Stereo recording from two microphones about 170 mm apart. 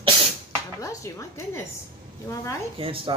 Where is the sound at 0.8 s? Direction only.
20° left (ahead or behind).